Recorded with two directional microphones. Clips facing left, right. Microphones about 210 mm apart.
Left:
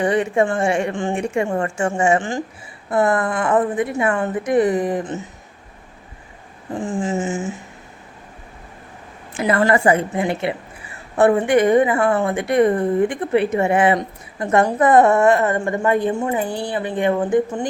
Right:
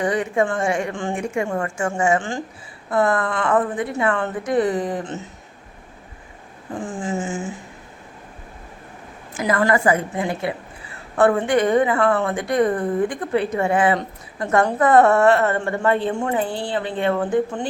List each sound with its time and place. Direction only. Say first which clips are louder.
0.0 s a woman's voice: left 3 dB; 25° left (ahead or behind)
7.0 s a woman's voice: left 2 dB; 25° left (ahead or behind)
9.4 s a woman's voice: left 2 dB; 25° left (ahead or behind)